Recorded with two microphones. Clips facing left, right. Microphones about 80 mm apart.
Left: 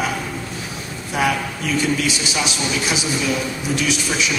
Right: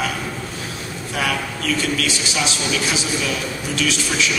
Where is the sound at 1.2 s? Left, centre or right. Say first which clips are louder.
Left 3 dB; centre.